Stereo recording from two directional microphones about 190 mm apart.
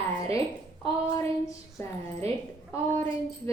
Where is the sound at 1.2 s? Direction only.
15° left (ahead or behind).